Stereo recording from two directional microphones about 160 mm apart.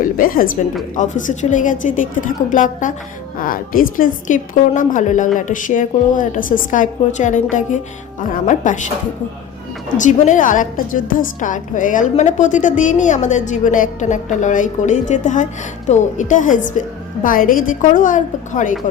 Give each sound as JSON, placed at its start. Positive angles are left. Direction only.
{"t": 0.0, "sound": "a woman's voice", "side_deg": 60}
{"t": 10.0, "sound": "a woman's voice", "side_deg": 50}